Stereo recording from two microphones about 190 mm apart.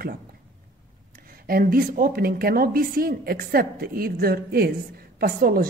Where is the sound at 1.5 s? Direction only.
50° right (ahead or behind).